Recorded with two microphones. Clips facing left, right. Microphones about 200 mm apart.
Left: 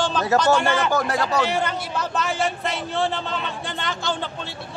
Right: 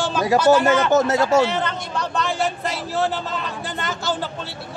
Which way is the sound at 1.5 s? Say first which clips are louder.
Even; 5° left (ahead or behind).